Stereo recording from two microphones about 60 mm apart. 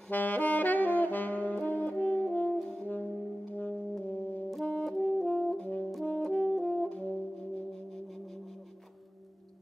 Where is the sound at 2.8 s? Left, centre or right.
Left.